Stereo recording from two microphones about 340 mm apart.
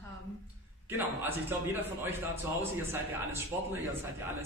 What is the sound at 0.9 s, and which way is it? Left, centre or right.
A man's voice, centre.